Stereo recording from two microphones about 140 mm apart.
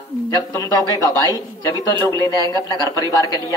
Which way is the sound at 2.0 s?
25° left (ahead or behind).